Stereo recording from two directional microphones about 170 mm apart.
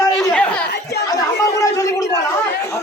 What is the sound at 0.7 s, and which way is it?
Speech, 75° left (ahead or behind).